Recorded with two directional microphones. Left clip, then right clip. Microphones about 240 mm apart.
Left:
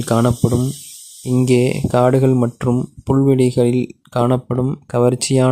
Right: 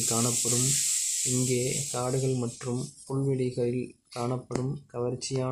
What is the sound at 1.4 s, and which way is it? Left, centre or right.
Speech, left.